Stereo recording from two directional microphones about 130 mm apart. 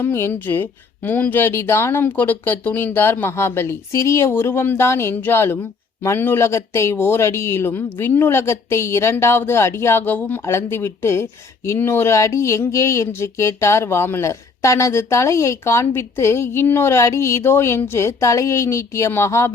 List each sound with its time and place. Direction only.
0.0 s speech: 20° left (ahead or behind)